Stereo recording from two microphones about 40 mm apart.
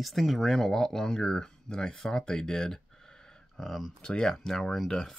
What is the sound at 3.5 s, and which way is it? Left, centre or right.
Speech, centre.